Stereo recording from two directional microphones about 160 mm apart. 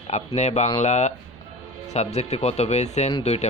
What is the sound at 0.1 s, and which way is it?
Speech, 45° left (ahead or behind).